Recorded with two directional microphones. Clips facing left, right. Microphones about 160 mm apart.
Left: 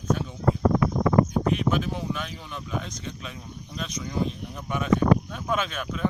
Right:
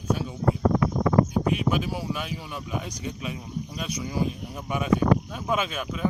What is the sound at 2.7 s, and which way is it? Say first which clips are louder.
Speech: right 1 dB; 10° right (ahead or behind).